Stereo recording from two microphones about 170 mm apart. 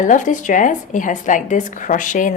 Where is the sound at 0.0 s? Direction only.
50° left (ahead or behind).